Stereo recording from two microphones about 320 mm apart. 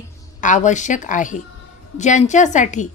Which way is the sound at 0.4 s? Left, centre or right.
Left.